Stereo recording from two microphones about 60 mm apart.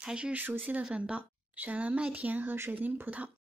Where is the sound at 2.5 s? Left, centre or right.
Right.